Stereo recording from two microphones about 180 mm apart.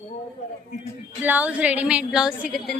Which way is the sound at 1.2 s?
10° right (ahead or behind).